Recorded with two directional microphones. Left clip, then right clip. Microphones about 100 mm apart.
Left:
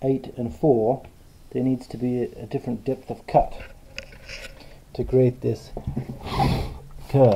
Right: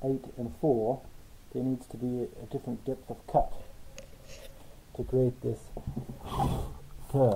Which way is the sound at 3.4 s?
10° left (ahead or behind).